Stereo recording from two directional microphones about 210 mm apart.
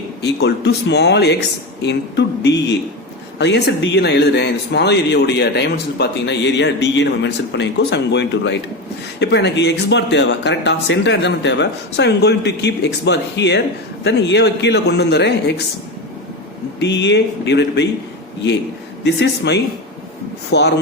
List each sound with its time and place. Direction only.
0.2 s speech: 50° left (ahead or behind)
16.8 s speech: 55° left (ahead or behind)
19.0 s speech: 55° left (ahead or behind)